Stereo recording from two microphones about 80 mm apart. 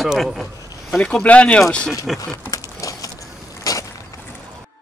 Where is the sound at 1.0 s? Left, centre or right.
Centre.